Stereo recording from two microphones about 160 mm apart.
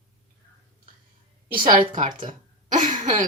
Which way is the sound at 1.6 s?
55° right (ahead or behind).